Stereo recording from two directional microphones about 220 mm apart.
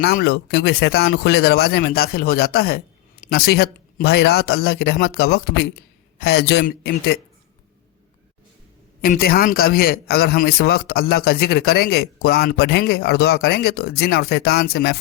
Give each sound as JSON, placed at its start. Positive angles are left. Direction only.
{"t": 0.0, "sound": "a man's voice", "side_deg": 45}
{"t": 9.0, "sound": "a man's voice", "side_deg": 40}